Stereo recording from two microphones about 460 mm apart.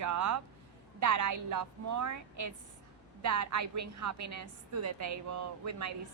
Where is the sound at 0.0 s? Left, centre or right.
Right.